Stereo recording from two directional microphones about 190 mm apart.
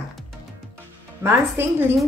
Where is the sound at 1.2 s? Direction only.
10° right (ahead or behind).